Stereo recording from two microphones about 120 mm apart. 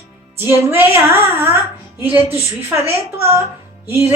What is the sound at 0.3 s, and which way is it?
A woman's voice, 20° right (ahead or behind).